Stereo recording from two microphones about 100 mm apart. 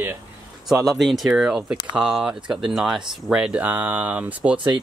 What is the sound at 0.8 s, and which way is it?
Speech, centre (ahead or behind).